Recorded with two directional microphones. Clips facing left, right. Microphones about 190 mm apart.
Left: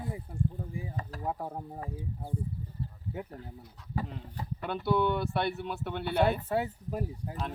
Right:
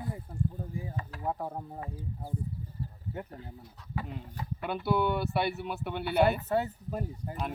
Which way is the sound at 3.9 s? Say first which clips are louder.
Left 2 dB; 40° left (ahead or behind).